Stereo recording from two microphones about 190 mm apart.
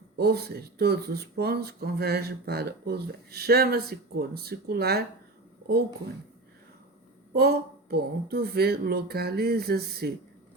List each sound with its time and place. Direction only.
0.2 s speech: 55° right (ahead or behind)
7.3 s speech: 55° right (ahead or behind)